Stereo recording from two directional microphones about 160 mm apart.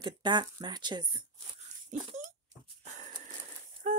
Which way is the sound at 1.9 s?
50° right (ahead or behind).